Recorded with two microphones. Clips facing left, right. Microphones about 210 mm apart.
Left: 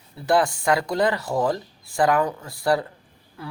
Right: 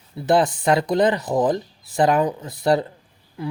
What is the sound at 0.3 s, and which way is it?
Speech, 20° right (ahead or behind).